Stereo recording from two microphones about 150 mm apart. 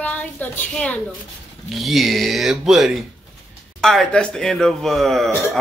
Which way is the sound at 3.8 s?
Centre (ahead or behind).